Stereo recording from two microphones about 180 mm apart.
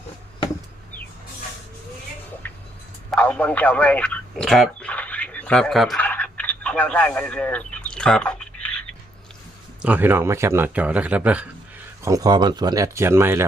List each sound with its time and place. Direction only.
2.4 s a sound: 10° left (ahead or behind)
3.1 s radio: 5° left (ahead or behind)
9.8 s speech: 10° right (ahead or behind)
12.0 s speech: 20° right (ahead or behind)